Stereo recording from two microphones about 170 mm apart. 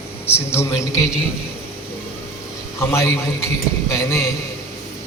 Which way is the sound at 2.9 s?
15° left (ahead or behind).